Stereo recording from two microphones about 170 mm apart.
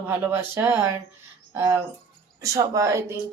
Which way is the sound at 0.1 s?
15° right (ahead or behind).